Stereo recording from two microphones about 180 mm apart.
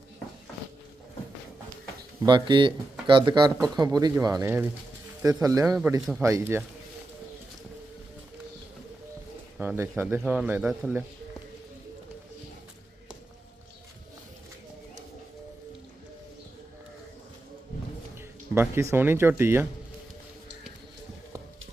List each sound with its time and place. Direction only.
2.2 s speech: 25° right (ahead or behind)
5.6 s speech: 5° right (ahead or behind)
6.2 s speech: 15° right (ahead or behind)
9.6 s speech: 10° right (ahead or behind)
18.5 s speech: 15° right (ahead or behind)